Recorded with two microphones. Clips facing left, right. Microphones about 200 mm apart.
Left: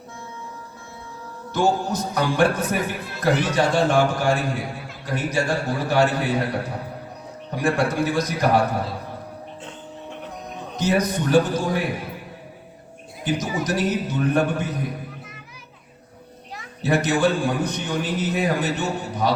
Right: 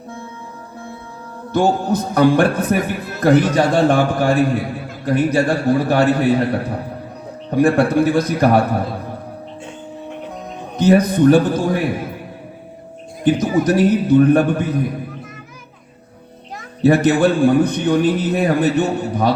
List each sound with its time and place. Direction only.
1.5 s a man's voice: 55° right (ahead or behind)
10.8 s a man's voice: 55° right (ahead or behind)
13.2 s a man's voice: 55° right (ahead or behind)
16.8 s a man's voice: 55° right (ahead or behind)